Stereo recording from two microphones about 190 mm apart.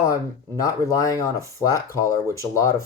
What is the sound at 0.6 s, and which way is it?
Speech, 20° left (ahead or behind).